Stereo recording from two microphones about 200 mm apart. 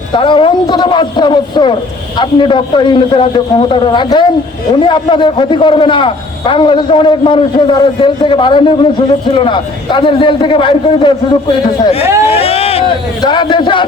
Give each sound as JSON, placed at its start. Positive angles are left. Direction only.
{"t": 0.2, "sound": "a man's voice", "side_deg": 25}
{"t": 12.3, "sound": "a man's voice", "side_deg": 30}